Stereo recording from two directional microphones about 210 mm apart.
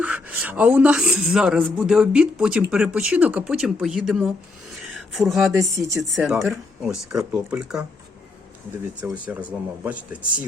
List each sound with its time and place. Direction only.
0.0 s speech: 5° right (ahead or behind)
4.7 s a sound: centre (ahead or behind)
5.5 s speech: 15° right (ahead or behind)
6.0 s speech: centre (ahead or behind)
9.0 s speech: 5° right (ahead or behind)